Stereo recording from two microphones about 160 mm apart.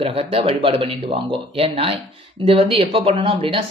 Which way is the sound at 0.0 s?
40° right (ahead or behind).